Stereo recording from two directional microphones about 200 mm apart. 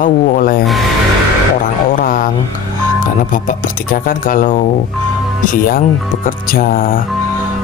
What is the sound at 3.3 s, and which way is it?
Speech, 45° left (ahead or behind).